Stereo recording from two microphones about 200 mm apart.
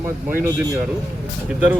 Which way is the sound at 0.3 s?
10° right (ahead or behind).